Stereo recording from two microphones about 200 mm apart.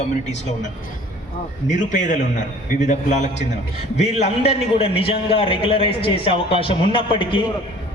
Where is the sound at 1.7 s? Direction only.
40° left (ahead or behind).